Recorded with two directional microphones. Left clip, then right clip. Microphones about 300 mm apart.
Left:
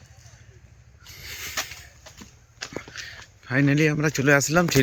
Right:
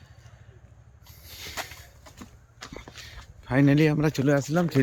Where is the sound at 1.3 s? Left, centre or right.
Centre.